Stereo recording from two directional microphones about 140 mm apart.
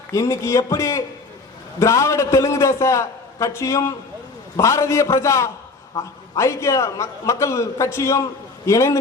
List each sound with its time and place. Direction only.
0.1 s a man's voice: 20° left (ahead or behind)